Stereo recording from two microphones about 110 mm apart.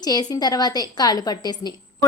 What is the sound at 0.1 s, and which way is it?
A woman's voice, 40° left (ahead or behind).